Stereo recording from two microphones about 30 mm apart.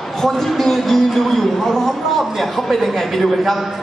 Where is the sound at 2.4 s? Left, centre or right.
Centre.